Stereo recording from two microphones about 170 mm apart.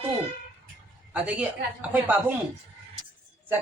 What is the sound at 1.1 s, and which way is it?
A man's voice, 10° right (ahead or behind).